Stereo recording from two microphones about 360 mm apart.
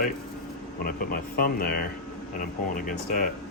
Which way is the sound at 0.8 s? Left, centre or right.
Left.